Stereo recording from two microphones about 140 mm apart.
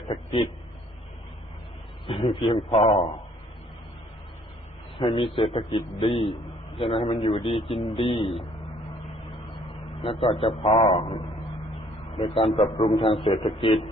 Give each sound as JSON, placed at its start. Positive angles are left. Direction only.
{"t": 0.1, "sound": "a man's voice", "side_deg": 45}
{"t": 2.0, "sound": "a man's voice", "side_deg": 40}
{"t": 4.9, "sound": "a man's voice", "side_deg": 40}
{"t": 10.0, "sound": "a man's voice", "side_deg": 40}